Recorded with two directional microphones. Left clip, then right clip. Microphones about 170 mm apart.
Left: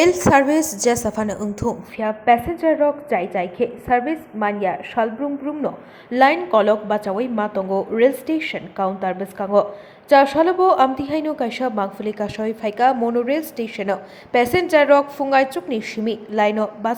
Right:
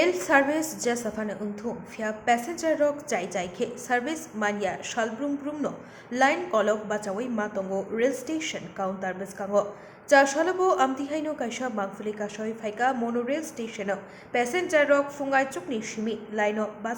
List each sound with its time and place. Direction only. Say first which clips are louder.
0.0 s a woman's voice: left 7 dB; 35° left (ahead or behind)